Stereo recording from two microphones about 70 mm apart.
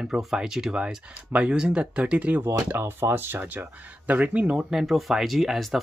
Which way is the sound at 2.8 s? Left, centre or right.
Right.